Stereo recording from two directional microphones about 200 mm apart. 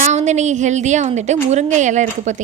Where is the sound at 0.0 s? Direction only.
35° right (ahead or behind).